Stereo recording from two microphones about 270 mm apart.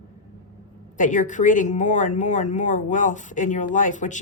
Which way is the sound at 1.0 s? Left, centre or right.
Left.